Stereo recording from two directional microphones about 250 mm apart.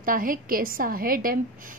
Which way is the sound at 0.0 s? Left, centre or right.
Right.